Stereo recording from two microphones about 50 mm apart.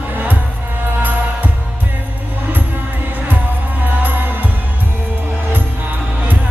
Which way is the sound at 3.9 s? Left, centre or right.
Right.